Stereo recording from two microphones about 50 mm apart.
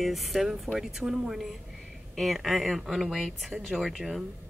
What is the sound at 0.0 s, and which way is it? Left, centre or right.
Speech, centre.